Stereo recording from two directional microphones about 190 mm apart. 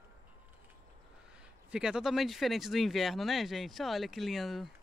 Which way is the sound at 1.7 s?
5° right (ahead or behind).